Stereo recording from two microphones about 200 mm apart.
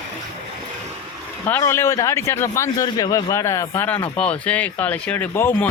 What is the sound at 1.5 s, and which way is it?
A man's voice, 15° left (ahead or behind).